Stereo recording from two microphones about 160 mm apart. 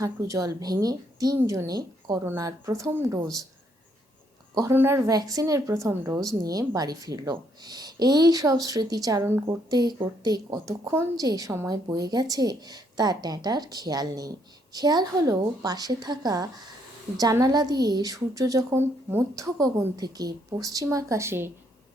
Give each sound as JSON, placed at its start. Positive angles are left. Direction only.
{"t": 0.0, "sound": "a woman's voice", "side_deg": -20}
{"t": 4.5, "sound": "a woman's voice", "side_deg": -15}